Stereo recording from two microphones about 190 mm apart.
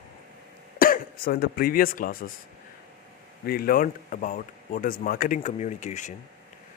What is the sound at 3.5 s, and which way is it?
A man's voice, 50° left (ahead or behind).